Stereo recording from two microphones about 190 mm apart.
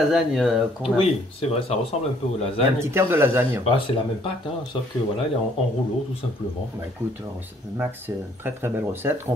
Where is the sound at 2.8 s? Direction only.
15° right (ahead or behind).